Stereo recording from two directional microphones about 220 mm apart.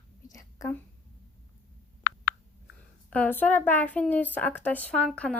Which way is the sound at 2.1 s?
45° left (ahead or behind).